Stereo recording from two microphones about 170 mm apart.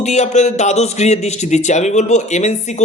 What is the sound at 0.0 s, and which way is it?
Speech, 40° left (ahead or behind).